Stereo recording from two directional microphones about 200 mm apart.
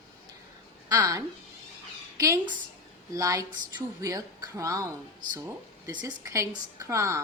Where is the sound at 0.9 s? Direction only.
20° right (ahead or behind).